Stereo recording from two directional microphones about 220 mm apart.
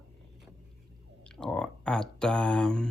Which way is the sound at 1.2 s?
5° left (ahead or behind).